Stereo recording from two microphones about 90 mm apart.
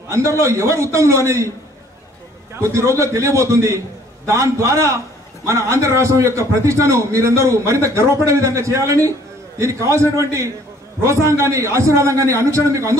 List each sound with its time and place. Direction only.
0.1 s a man's voice: 30° right (ahead or behind)
2.6 s a man's voice: 35° right (ahead or behind)